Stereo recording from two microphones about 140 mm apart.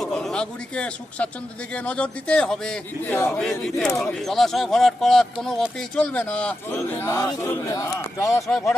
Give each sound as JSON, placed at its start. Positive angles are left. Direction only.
{"t": 0.0, "sound": "a man's voice", "side_deg": 5}